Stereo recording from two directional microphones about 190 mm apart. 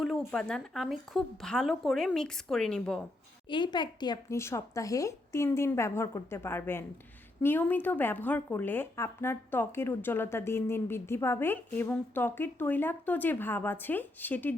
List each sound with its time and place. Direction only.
0.0 s speech: centre (ahead or behind)
3.5 s speech: 25° left (ahead or behind)